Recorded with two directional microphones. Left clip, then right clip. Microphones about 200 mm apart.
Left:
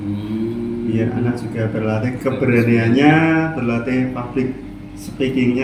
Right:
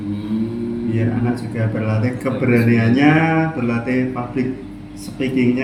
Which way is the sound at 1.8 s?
15° right (ahead or behind).